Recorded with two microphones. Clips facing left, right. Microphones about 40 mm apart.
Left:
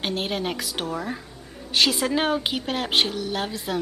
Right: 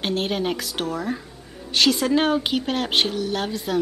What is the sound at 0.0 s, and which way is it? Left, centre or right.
Speech, centre.